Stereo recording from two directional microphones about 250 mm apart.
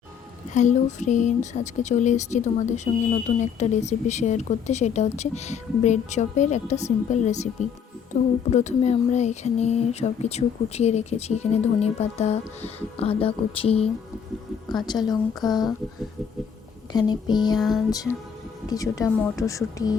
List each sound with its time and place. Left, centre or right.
0.5 s speech: left
16.9 s speech: centre
17.6 s music: centre
17.9 s speech: centre